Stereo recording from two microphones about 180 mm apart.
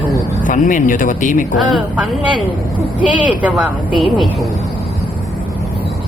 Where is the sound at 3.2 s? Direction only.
10° right (ahead or behind).